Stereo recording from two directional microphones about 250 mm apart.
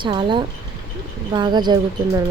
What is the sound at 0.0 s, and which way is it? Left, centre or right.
Speech, centre.